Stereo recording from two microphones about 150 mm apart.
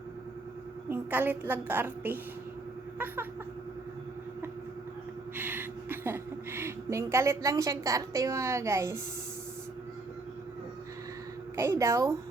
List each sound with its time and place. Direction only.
0.9 s a woman's voice: 15° right (ahead or behind)
5.4 s a woman's voice: 15° right (ahead or behind)
11.5 s a woman's voice: 20° right (ahead or behind)